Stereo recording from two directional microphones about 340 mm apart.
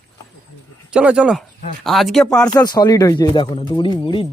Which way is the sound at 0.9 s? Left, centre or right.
Centre.